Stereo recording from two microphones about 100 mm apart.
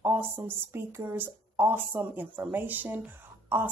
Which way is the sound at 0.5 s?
20° right (ahead or behind).